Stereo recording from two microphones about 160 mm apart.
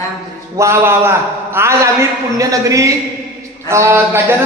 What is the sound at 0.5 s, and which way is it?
A man's voice, 15° right (ahead or behind).